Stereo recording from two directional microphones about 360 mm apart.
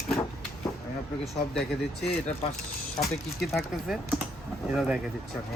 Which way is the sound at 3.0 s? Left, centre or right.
Centre.